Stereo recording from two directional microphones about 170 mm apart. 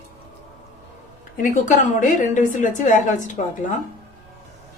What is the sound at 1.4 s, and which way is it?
A woman's voice, 50° left (ahead or behind).